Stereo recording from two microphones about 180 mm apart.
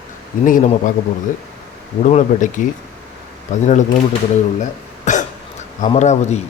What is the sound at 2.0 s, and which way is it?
Speech, 40° left (ahead or behind).